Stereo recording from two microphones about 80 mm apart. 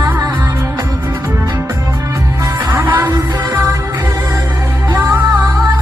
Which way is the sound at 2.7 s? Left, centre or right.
Right.